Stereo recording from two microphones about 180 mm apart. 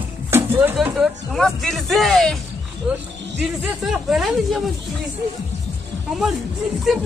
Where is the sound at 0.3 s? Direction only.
10° right (ahead or behind).